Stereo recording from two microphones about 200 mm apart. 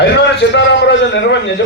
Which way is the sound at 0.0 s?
60° left (ahead or behind).